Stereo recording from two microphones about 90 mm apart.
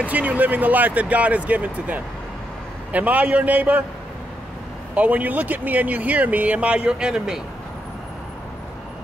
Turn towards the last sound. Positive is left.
turn(degrees=-5)  # may be behind; listen again after turning